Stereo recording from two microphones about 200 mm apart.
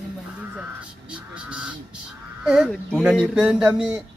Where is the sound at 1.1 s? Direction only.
5° right (ahead or behind).